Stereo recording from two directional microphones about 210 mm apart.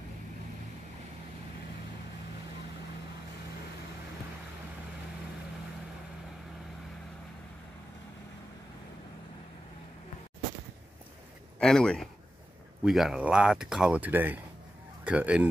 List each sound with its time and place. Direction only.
11.6 s speech: 5° left (ahead or behind)